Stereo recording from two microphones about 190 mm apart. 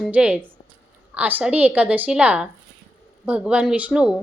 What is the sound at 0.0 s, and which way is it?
A woman's voice, 5° right (ahead or behind).